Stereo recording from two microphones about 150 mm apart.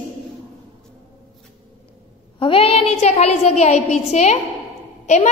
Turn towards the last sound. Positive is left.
turn(degrees=50)  # may be behind; listen again after turning